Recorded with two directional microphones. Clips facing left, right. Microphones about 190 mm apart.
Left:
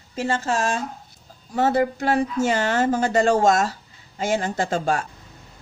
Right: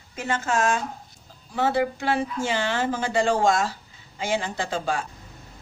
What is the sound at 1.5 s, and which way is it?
Speech, 45° left (ahead or behind).